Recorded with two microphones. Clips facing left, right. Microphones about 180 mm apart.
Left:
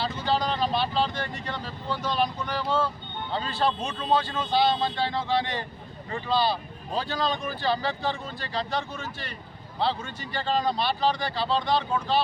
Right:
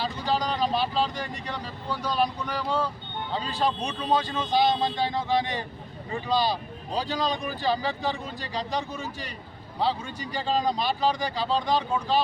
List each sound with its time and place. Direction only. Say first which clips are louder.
0.0 s speech: left 1 dB; 10° right (ahead or behind)
10.3 s speech: even; 15° right (ahead or behind)